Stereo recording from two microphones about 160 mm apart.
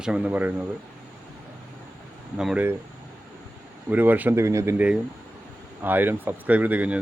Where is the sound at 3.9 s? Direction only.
10° right (ahead or behind).